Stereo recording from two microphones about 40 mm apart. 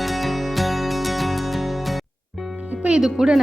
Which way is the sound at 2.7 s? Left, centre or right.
Right.